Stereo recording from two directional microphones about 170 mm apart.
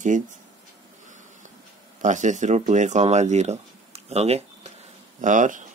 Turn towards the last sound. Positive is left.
turn(degrees=-50)  # may be behind; listen again after turning